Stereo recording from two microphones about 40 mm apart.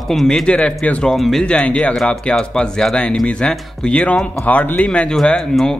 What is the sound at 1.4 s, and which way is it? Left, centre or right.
Speech, left.